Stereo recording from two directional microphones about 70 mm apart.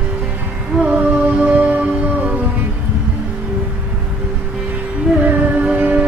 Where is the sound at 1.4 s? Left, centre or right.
Right.